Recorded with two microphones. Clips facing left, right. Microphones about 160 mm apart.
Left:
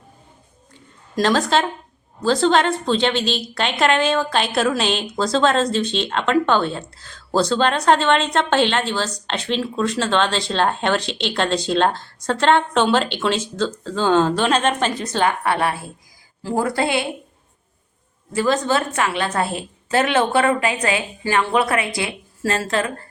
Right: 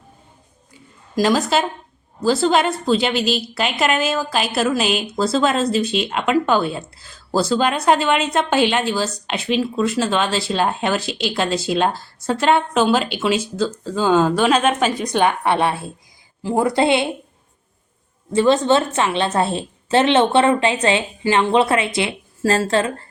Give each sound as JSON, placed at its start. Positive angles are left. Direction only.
{"t": 1.1, "sound": "a woman's voice", "side_deg": -5}
{"t": 18.3, "sound": "a woman's voice", "side_deg": -25}